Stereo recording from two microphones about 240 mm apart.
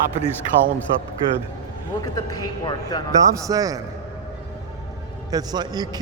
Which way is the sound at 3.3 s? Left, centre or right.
Centre.